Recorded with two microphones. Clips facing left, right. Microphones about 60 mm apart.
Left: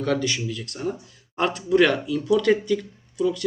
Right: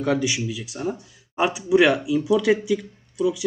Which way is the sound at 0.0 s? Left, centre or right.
Centre.